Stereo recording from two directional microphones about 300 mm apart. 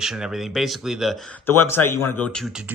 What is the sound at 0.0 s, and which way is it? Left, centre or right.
Speech, centre.